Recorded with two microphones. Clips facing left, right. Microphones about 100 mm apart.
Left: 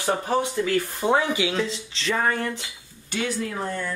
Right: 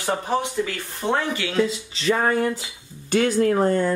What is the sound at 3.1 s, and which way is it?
Speech, 45° right (ahead or behind).